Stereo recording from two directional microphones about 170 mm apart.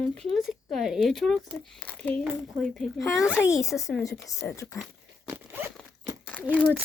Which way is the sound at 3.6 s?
20° left (ahead or behind).